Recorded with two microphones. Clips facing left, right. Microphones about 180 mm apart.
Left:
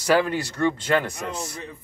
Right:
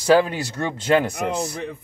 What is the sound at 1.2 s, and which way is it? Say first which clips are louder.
Speech: right 7 dB; 70° right (ahead or behind).